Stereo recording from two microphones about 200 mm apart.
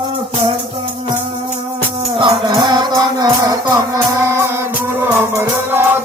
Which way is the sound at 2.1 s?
20° right (ahead or behind).